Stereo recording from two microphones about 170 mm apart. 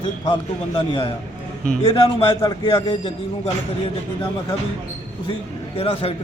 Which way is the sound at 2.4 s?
25° left (ahead or behind).